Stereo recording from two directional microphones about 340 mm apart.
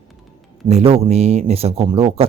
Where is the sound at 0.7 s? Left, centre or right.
Centre.